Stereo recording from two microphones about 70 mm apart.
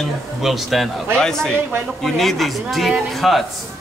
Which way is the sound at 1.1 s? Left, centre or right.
Centre.